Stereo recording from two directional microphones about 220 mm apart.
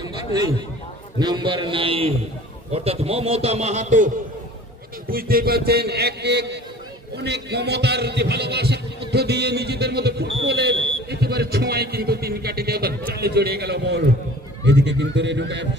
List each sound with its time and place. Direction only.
1.2 s a man's voice: 20° right (ahead or behind)
5.1 s speech: 45° right (ahead or behind)